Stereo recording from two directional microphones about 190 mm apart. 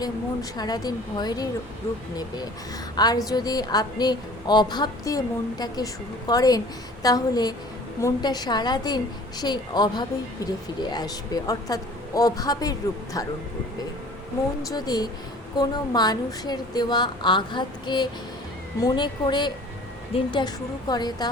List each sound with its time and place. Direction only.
0.5 s a woman's voice: 20° left (ahead or behind)
2.9 s a woman's voice: 20° left (ahead or behind)
14.6 s a woman's voice: 20° left (ahead or behind)